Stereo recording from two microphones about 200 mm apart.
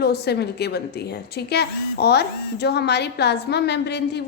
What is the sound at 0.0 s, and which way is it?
A woman's voice, 55° left (ahead or behind).